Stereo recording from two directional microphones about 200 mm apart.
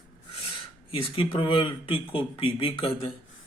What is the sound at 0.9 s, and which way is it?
A man's voice, 30° left (ahead or behind).